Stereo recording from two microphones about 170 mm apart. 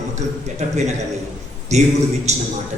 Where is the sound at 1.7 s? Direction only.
40° right (ahead or behind).